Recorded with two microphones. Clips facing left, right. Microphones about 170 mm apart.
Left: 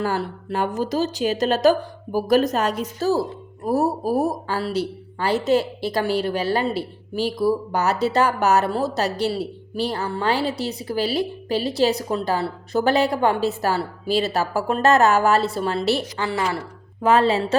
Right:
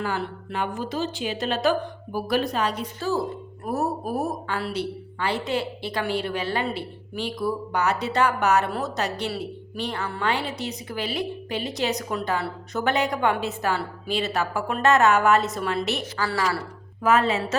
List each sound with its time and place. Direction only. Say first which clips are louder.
0.0 s a woman's voice: left 4 dB; 40° left (ahead or behind)
16.2 s a woman's voice: left 2 dB; 20° left (ahead or behind)